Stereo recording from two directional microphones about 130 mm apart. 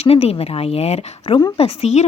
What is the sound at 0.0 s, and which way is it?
A woman's voice, 50° left (ahead or behind).